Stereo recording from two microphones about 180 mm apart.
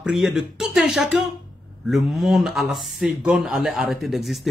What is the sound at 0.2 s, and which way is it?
Speech, 5° right (ahead or behind).